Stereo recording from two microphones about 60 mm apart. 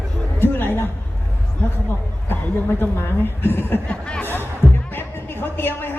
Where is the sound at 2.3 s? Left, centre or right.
Left.